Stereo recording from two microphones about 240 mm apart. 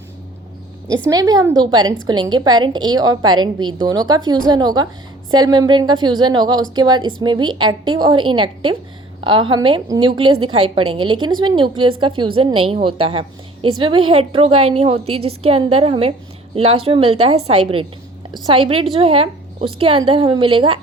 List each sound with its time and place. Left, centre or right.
0.9 s a woman's voice: centre
18.4 s speech: right